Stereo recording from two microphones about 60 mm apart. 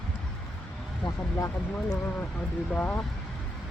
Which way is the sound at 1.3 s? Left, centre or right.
Left.